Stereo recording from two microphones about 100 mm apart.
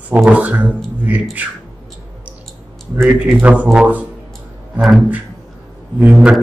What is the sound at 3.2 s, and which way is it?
Speech, 15° right (ahead or behind).